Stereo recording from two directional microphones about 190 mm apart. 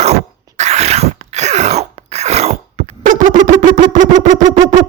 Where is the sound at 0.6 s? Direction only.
35° right (ahead or behind).